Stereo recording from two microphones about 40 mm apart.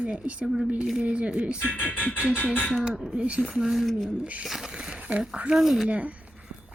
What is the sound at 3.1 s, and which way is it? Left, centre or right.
Speech, right.